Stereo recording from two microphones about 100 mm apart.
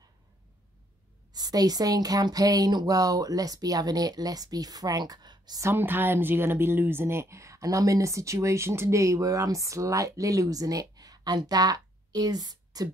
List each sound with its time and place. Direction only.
1.3 s speech: 40° right (ahead or behind)
5.6 s speech: 25° right (ahead or behind); by 12.9 s 40° right (ahead or behind)